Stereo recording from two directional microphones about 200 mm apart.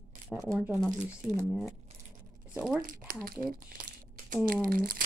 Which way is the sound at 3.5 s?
45° right (ahead or behind).